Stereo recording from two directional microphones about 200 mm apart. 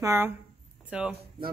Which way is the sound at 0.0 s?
10° right (ahead or behind).